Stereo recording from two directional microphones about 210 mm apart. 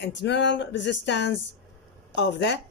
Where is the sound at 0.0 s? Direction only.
60° left (ahead or behind).